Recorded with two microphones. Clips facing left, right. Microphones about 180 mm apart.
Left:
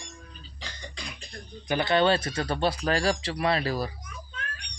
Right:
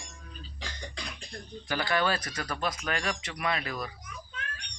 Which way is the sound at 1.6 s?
20° left (ahead or behind).